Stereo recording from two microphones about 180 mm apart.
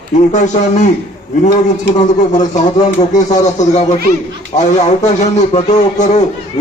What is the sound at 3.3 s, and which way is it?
Speech, 40° left (ahead or behind).